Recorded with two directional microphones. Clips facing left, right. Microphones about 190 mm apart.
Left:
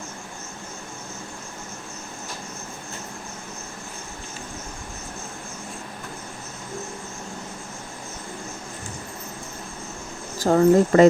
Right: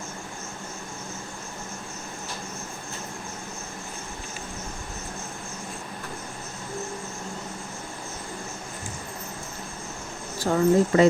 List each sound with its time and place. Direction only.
10.3 s speech: 40° left (ahead or behind)